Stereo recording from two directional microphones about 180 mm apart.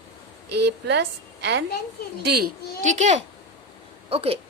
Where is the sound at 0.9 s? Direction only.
70° right (ahead or behind).